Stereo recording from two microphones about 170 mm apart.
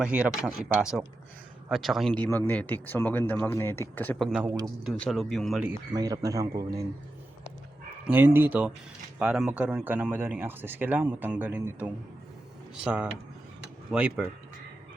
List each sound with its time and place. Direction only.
0.0 s speech: 5° right (ahead or behind); by 4.2 s 10° left (ahead or behind)
4.2 s speech: 5° right (ahead or behind)
5.9 s speech: 20° right (ahead or behind)
8.0 s speech: 10° right (ahead or behind)